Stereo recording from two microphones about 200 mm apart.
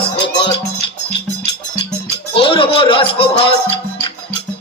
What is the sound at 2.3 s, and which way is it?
Music, 25° left (ahead or behind).